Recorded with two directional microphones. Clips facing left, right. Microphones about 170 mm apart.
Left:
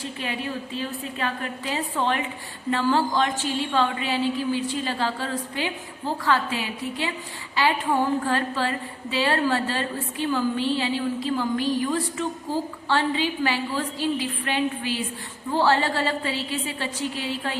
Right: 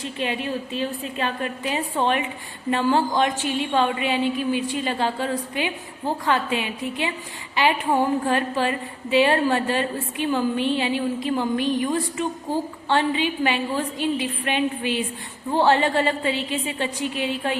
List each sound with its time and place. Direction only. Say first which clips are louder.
0.2 s a woman's voice: right 5 dB; 20° right (ahead or behind)